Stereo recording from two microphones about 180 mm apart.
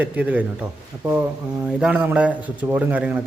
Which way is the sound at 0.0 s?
10° right (ahead or behind).